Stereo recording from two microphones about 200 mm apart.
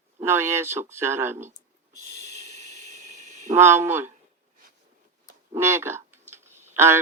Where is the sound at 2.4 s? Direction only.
35° right (ahead or behind).